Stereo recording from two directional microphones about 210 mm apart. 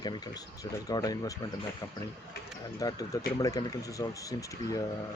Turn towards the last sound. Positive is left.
turn(degrees=15)  # may be behind; listen again after turning